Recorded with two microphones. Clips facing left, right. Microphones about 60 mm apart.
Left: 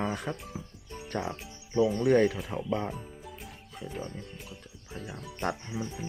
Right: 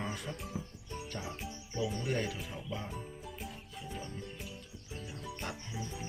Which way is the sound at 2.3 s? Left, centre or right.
Left.